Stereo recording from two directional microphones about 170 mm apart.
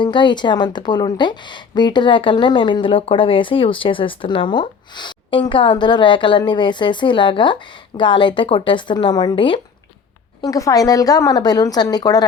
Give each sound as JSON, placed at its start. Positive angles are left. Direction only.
{"t": 0.0, "sound": "a woman's voice", "side_deg": 25}